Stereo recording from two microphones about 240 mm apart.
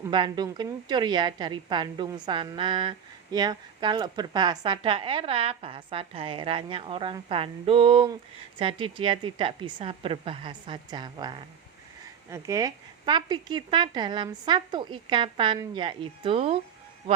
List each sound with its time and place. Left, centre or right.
0.1 s a woman's voice: centre